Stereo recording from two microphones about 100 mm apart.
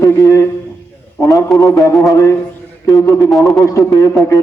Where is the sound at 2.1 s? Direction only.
30° left (ahead or behind).